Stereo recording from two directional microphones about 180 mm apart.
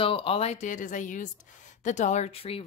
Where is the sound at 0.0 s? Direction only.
30° left (ahead or behind).